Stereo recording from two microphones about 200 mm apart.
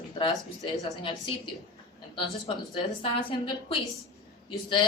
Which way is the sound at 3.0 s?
25° left (ahead or behind).